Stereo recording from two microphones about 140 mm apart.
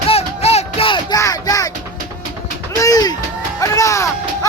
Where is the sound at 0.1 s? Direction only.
45° left (ahead or behind).